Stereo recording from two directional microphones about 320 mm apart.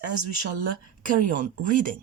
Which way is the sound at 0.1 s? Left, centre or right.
Right.